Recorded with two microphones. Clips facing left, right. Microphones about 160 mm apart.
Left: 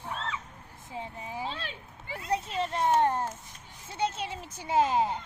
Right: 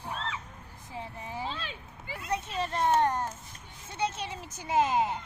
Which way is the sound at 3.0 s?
30° left (ahead or behind).